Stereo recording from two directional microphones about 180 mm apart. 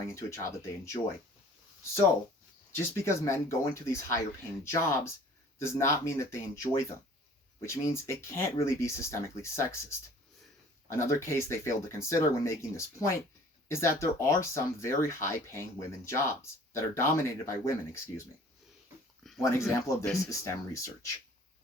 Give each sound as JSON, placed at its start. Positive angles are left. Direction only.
{"t": 0.1, "sound": "speech", "side_deg": 15}
{"t": 2.7, "sound": "speech", "side_deg": 15}
{"t": 10.8, "sound": "speech", "side_deg": 15}
{"t": 19.4, "sound": "speech", "side_deg": 15}